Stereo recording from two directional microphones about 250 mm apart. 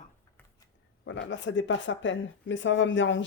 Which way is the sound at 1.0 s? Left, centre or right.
Left.